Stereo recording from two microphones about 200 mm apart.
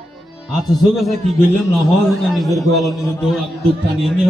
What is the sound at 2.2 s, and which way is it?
A man's voice, centre (ahead or behind).